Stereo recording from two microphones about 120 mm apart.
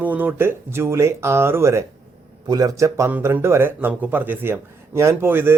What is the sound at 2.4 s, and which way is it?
Speech, 35° right (ahead or behind).